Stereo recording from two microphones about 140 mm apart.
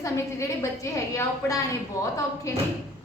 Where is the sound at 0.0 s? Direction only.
20° left (ahead or behind).